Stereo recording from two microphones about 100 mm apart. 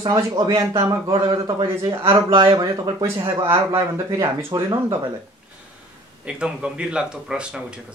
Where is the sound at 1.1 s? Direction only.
60° right (ahead or behind).